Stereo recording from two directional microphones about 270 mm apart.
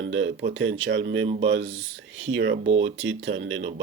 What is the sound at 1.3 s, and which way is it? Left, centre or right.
Speech, right.